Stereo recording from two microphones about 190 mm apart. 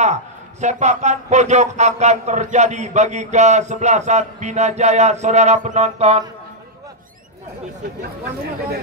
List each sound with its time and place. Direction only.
0.0 s a man's voice: 40° right (ahead or behind)